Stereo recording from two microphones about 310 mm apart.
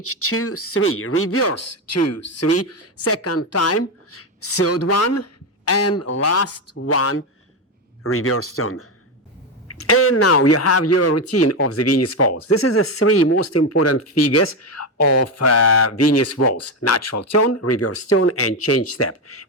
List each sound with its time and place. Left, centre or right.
0.0 s speech: left